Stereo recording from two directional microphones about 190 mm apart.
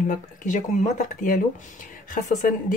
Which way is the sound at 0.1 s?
45° left (ahead or behind).